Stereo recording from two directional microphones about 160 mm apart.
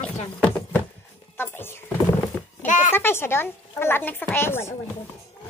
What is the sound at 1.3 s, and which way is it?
Speech, 15° left (ahead or behind).